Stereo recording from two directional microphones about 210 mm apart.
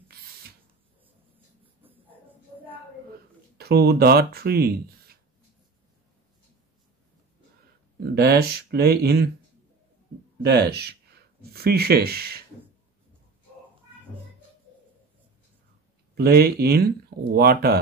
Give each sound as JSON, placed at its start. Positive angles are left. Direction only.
{"t": 1.8, "sound": "a sound", "side_deg": -10}
{"t": 3.5, "sound": "speech", "side_deg": -50}
{"t": 8.0, "sound": "speech", "side_deg": -50}
{"t": 10.4, "sound": "speech", "side_deg": -50}
{"t": 16.2, "sound": "speech", "side_deg": -45}